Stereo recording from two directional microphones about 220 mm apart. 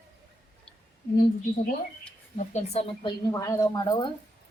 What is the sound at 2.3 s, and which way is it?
Speech, 30° left (ahead or behind).